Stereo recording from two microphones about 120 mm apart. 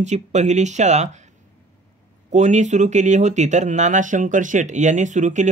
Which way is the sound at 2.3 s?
85° right.